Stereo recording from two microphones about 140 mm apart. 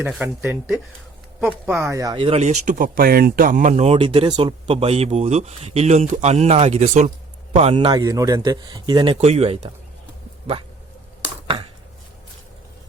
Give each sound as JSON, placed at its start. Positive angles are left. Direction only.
{"t": 0.2, "sound": "speech", "side_deg": -10}
{"t": 1.5, "sound": "speech", "side_deg": -10}
{"t": 2.1, "sound": "speech", "side_deg": -45}
{"t": 7.5, "sound": "speech", "side_deg": -45}
{"t": 7.9, "sound": "a man's voice", "side_deg": -25}
{"t": 9.2, "sound": "speech", "side_deg": -45}